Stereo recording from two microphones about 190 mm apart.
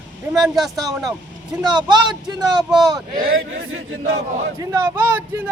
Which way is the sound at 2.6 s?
Centre (ahead or behind).